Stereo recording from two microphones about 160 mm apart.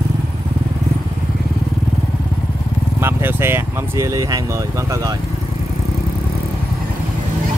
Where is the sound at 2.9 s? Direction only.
15° right (ahead or behind).